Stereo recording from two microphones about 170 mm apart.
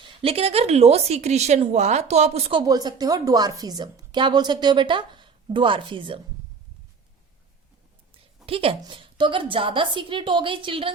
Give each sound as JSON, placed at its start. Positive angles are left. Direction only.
{"t": 0.0, "sound": "a woman's voice", "side_deg": -30}
{"t": 8.4, "sound": "a woman's voice", "side_deg": -35}